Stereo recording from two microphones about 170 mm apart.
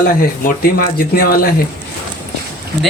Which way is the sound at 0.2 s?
60° left (ahead or behind).